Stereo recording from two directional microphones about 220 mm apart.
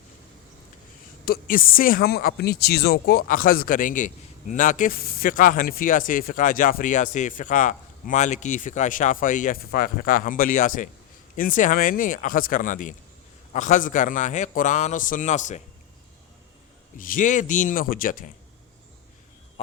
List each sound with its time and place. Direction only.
1.2 s speech: 40° left (ahead or behind)
17.0 s speech: 40° left (ahead or behind)
19.6 s speech: 25° left (ahead or behind)